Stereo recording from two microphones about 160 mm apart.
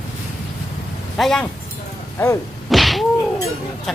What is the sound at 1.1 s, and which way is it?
Speech, centre (ahead or behind).